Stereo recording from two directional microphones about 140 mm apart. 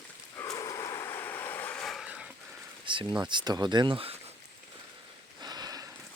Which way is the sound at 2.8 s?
35° right (ahead or behind).